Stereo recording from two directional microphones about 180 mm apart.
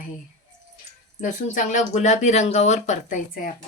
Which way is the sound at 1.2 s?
45° left (ahead or behind).